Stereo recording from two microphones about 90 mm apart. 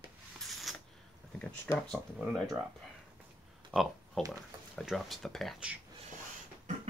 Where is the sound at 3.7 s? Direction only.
Centre (ahead or behind).